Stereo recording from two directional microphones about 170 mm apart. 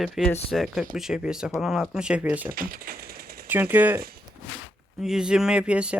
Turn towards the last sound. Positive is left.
turn(degrees=-5)  # may be behind; listen again after turning